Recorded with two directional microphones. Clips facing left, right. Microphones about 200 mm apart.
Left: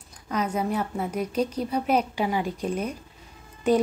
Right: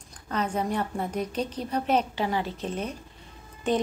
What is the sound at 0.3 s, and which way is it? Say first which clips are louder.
A woman's voice: left 2 dB; 10° left (ahead or behind).